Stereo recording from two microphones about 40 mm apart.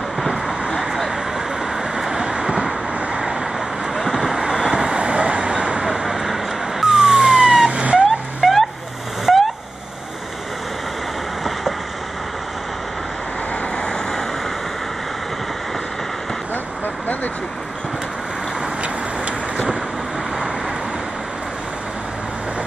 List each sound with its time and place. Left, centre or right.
0.7 s vehicle: centre
1.8 s vehicle: centre
3.5 s vehicle: centre
4.3 s vehicle: centre
5.9 s emergency vehicle: centre
7.7 s vehicle: right
8.4 s a sound: centre
9.2 s vehicle: centre
13.7 s vehicle: centre
16.8 s vehicle: left